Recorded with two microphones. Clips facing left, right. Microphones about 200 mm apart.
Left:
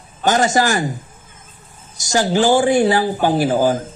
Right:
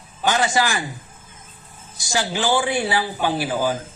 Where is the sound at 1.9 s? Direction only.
45° left (ahead or behind).